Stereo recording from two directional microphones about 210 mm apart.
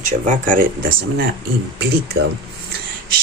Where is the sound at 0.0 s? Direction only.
35° right (ahead or behind).